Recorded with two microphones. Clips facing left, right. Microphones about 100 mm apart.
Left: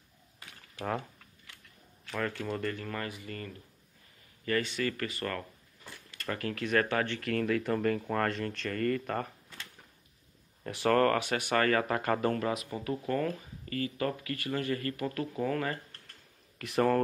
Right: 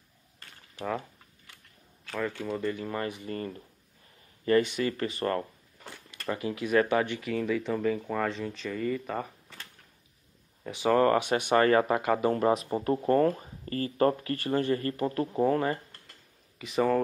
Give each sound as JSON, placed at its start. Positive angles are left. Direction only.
{"t": 2.1, "sound": "speech", "side_deg": -5}
{"t": 4.5, "sound": "speech", "side_deg": -20}
{"t": 6.2, "sound": "speech", "side_deg": -15}
{"t": 7.2, "sound": "speech", "side_deg": -5}
{"t": 10.6, "sound": "speech", "side_deg": 0}
{"t": 10.9, "sound": "speech", "side_deg": -15}
{"t": 12.0, "sound": "speech", "side_deg": -15}
{"t": 12.4, "sound": "speech", "side_deg": -30}
{"t": 16.5, "sound": "speech", "side_deg": 0}